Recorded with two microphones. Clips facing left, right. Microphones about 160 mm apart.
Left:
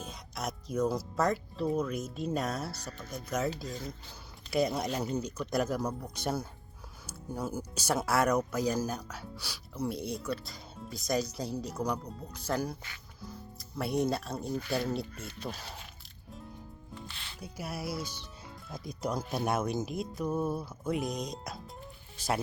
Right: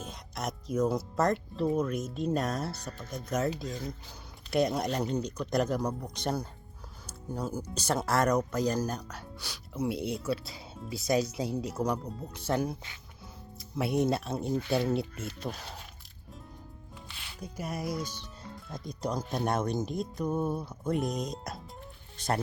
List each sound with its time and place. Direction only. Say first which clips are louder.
0.0 s speech: right 1 dB; centre (ahead or behind)
14.5 s speech: right 4 dB; 25° right (ahead or behind)
14.8 s speech: right 4 dB; centre (ahead or behind)
16.9 s music: left 4 dB; 10° right (ahead or behind)
17.4 s speech: right 3 dB; 5° left (ahead or behind)